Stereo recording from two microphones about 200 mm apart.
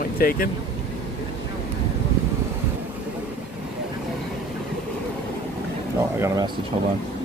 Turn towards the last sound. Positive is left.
turn(degrees=-15)  # may be behind; listen again after turning